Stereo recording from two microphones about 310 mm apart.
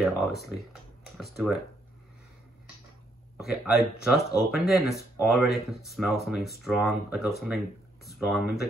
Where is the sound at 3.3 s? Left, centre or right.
Centre.